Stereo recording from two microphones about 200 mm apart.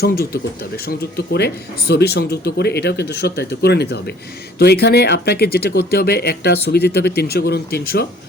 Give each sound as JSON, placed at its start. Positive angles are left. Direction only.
{"t": 0.9, "sound": "speech", "side_deg": 55}